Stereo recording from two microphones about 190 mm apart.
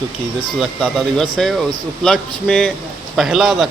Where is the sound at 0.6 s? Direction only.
Centre (ahead or behind).